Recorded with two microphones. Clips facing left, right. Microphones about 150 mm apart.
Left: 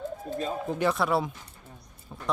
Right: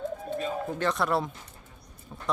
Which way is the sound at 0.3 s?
35° left (ahead or behind).